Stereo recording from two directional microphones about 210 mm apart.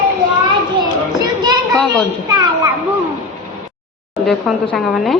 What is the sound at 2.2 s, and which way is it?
Speech, 20° right (ahead or behind).